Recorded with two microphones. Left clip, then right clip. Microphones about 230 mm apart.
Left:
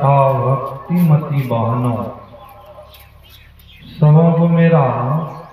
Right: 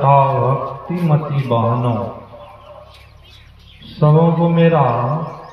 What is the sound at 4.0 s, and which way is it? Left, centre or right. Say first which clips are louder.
Mantra: even; right.